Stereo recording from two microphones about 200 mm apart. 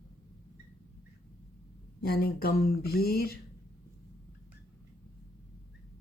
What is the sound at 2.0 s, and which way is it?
Speech, 50° left (ahead or behind).